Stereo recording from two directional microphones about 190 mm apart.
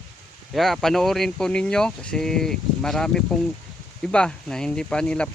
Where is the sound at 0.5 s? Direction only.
Centre (ahead or behind).